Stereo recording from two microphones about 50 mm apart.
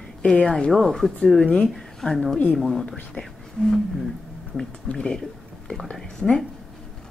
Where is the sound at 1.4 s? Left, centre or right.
Left.